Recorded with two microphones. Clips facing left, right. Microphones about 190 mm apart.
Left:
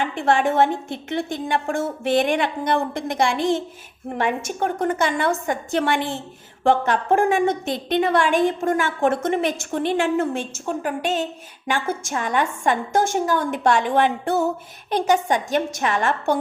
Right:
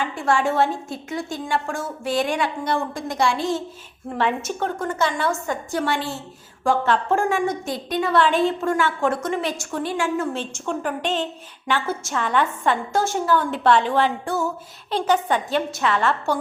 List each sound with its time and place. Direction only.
0.1 s a woman's voice: 20° left (ahead or behind)
1.5 s a woman's voice: 55° left (ahead or behind)
2.2 s a woman's voice: 20° left (ahead or behind)
10.8 s a woman's voice: 10° left (ahead or behind)
14.3 s a woman's voice: 60° left (ahead or behind)
14.8 s a woman's voice: 15° left (ahead or behind)